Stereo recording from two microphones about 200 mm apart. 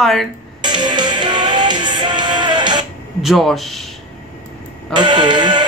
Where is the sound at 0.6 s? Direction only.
20° right (ahead or behind).